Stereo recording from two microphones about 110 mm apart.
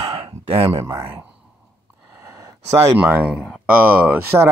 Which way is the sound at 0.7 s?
35° right (ahead or behind).